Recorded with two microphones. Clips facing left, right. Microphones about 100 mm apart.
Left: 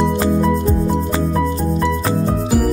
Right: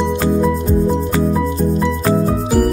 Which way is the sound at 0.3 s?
Centre (ahead or behind).